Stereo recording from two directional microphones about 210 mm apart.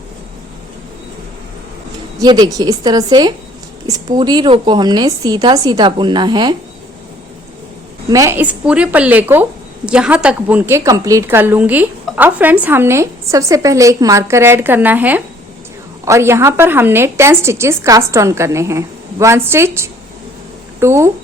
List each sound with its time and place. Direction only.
2.1 s a woman's voice: 20° right (ahead or behind)
8.1 s speech: 15° right (ahead or behind)